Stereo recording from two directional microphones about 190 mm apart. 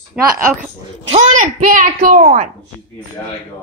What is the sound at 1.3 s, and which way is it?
A child's voice, 45° right (ahead or behind).